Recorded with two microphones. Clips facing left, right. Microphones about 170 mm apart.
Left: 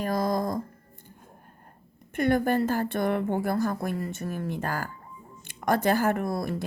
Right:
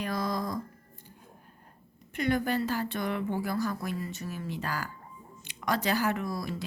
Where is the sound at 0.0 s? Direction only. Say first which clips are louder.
Left 5 dB; 45° left (ahead or behind).